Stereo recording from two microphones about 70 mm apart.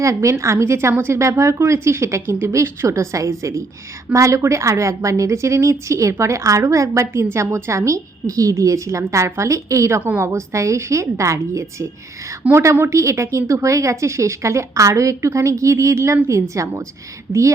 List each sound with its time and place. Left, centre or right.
0.0 s a woman's voice: right
10.2 s a woman's voice: right